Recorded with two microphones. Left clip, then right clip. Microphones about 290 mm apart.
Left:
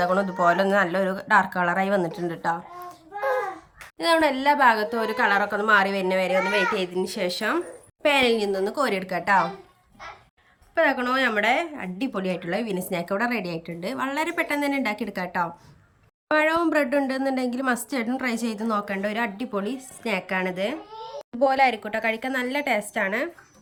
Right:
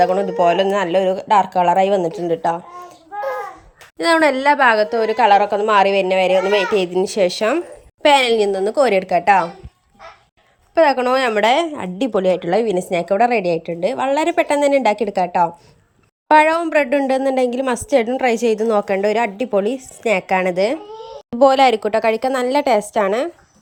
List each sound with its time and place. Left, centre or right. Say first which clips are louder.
0.0 s a woman's voice: right 7 dB; centre
3.9 s a woman's voice: right 6 dB; centre
10.8 s a woman's voice: right 8 dB; centre